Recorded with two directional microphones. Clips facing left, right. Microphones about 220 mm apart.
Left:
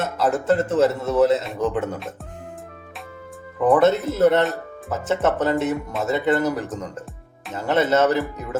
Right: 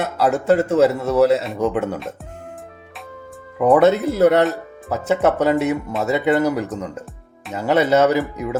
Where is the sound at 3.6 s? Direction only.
10° right (ahead or behind).